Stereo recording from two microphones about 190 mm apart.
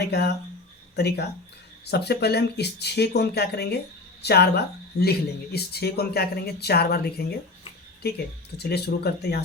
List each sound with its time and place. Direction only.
0.0 s speech: 60° left (ahead or behind)
8.5 s speech: 60° left (ahead or behind)